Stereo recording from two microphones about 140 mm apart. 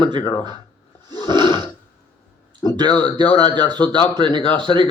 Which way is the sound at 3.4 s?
30° right (ahead or behind).